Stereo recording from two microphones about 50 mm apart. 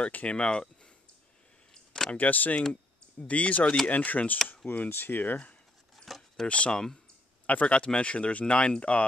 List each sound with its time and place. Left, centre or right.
0.0 s speech: left
2.0 s speech: left
4.6 s speech: left
6.0 s a sound: centre
6.4 s speech: left